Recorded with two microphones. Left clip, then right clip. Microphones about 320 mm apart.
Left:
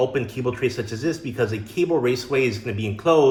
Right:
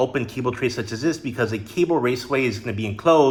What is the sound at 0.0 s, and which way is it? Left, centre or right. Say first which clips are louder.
Speech: even; centre.